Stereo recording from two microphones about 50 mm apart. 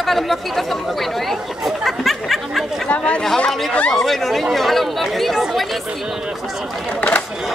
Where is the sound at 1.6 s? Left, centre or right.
Centre.